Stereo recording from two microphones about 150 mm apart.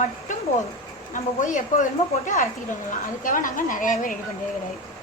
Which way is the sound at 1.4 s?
55° left (ahead or behind).